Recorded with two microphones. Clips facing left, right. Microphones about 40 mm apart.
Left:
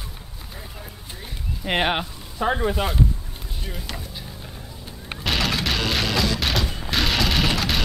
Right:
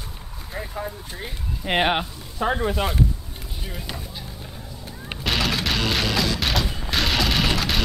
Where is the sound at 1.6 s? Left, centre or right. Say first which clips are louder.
Right 1 dB; centre.